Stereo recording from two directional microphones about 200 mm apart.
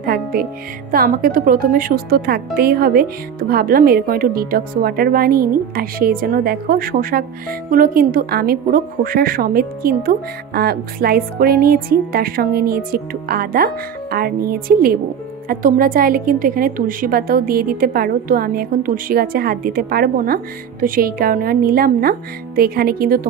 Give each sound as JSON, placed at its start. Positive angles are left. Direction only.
{"t": 0.0, "sound": "speech", "side_deg": -50}